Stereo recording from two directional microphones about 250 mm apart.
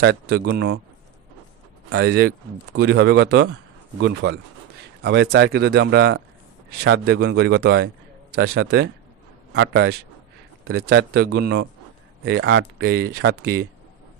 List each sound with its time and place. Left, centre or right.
0.0 s speech: right
1.9 s a man's voice: right